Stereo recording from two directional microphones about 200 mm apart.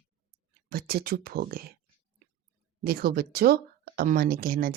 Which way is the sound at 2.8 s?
50° right (ahead or behind).